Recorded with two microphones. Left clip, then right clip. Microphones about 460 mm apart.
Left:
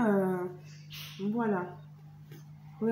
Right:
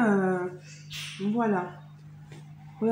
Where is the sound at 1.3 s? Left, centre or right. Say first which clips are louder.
Right 4 dB; left.